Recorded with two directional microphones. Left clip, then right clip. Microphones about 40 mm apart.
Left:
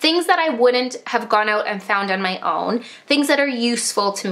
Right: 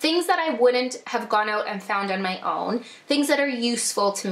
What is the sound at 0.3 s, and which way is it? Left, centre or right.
Speech, left.